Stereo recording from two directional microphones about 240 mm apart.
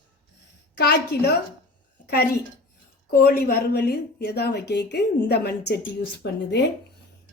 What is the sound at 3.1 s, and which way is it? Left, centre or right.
A woman's voice, left.